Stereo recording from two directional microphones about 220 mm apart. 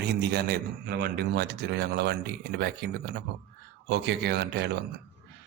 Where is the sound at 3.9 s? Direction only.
50° right (ahead or behind).